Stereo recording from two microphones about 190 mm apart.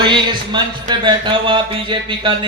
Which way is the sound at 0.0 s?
25° right (ahead or behind).